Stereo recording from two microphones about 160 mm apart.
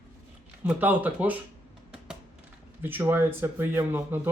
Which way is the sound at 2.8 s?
15° right (ahead or behind).